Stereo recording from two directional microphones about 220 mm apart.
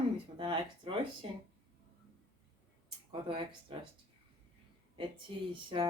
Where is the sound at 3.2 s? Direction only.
25° right (ahead or behind).